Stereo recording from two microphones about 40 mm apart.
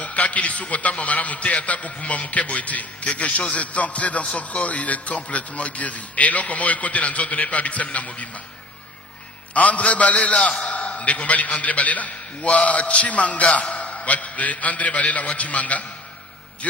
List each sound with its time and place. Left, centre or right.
0.0 s a man's voice: left
9.5 s a man's voice: left